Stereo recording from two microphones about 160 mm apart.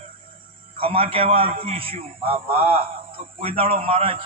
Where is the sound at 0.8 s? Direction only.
35° right (ahead or behind).